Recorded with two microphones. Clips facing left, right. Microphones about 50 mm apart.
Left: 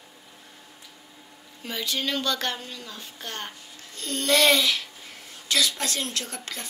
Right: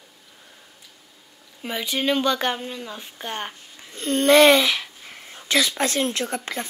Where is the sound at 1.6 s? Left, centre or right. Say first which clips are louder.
Right 4 dB; right.